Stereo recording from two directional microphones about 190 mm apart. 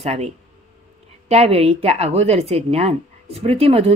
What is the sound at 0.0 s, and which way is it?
Speech, 35° right (ahead or behind).